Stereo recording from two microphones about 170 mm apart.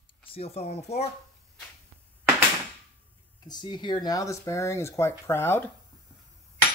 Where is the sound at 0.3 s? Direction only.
35° left (ahead or behind).